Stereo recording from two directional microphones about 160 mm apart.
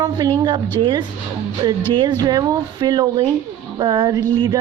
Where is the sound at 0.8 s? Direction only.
30° right (ahead or behind).